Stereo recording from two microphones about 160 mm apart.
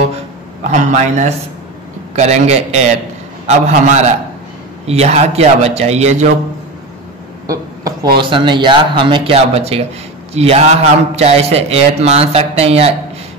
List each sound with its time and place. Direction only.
0.7 s a man's voice: 50° right (ahead or behind)
7.4 s a sound: 20° right (ahead or behind)
8.2 s a man's voice: 30° right (ahead or behind)